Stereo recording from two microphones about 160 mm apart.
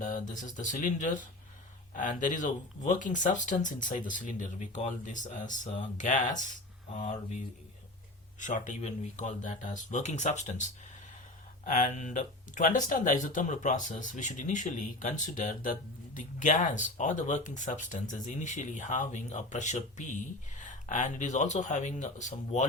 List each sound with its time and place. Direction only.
0.0 s speech: 55° left (ahead or behind)
6.4 s a sound: 50° left (ahead or behind)
7.0 s speech: 45° left (ahead or behind)
8.4 s speech: 50° left (ahead or behind)